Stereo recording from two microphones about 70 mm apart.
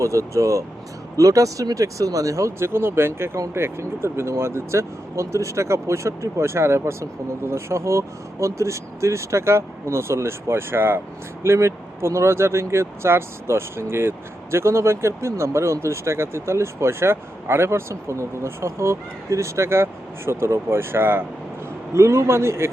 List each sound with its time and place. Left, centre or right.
0.0 s speech: right
21.9 s speech: right